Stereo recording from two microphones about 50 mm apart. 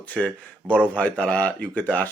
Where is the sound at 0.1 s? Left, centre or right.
Left.